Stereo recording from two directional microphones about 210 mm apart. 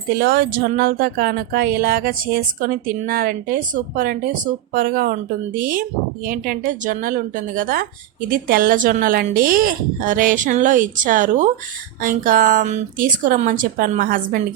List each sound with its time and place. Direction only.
0.1 s speech: 45° right (ahead or behind)